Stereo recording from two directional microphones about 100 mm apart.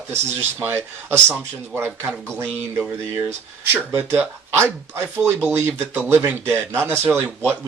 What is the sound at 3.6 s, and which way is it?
Speech, 20° right (ahead or behind).